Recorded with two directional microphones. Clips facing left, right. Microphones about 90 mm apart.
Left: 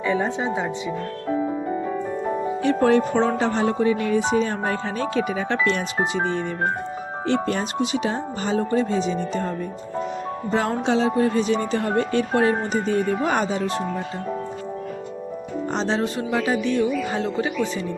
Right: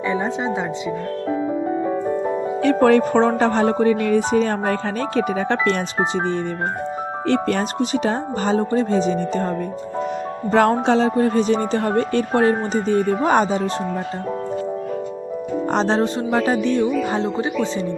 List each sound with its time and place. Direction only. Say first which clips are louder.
0.0 s speech: right 1 dB; 20° right (ahead or behind)
2.6 s speech: right 4 dB; 60° right (ahead or behind)
3.2 s music: right 4 dB; 45° right (ahead or behind)
7.3 s music: right 3 dB; 55° right (ahead or behind)
7.8 s speech: right 3 dB; 45° right (ahead or behind)
10.5 s music: right 6 dB; 50° right (ahead or behind)
11.2 s speech: right 3 dB; 35° right (ahead or behind)
15.7 s speech: right 5 dB; 45° right (ahead or behind)
16.0 s speech: right 4 dB; 35° right (ahead or behind)